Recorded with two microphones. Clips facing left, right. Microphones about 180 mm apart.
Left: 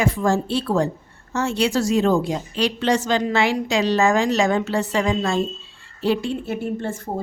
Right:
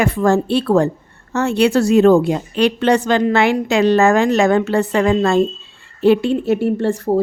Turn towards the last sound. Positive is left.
turn(degrees=-70)  # may be behind; listen again after turning